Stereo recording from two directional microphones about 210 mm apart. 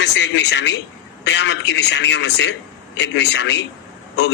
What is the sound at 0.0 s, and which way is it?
A man's voice, 55° left (ahead or behind).